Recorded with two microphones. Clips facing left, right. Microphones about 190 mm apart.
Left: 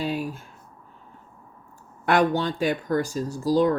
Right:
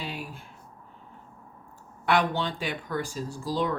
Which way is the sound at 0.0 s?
40° left (ahead or behind).